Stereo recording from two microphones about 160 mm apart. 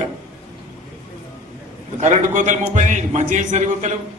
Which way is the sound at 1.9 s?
50° right (ahead or behind).